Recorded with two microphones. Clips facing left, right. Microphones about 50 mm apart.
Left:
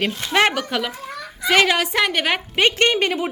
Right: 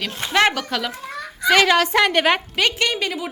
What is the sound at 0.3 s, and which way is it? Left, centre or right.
A woman's voice, centre.